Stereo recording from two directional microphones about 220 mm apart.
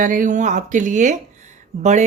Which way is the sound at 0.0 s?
35° right (ahead or behind).